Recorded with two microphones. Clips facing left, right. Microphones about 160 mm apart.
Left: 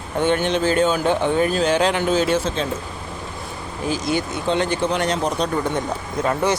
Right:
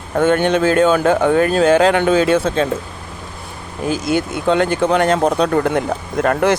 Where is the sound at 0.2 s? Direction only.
50° right (ahead or behind).